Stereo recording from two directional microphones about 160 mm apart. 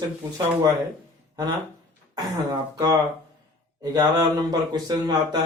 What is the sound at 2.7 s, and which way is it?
Speech, 25° right (ahead or behind).